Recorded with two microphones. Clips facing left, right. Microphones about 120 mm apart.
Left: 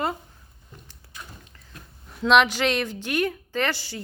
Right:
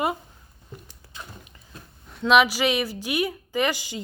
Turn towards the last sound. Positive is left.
turn(degrees=-15)  # may be behind; listen again after turning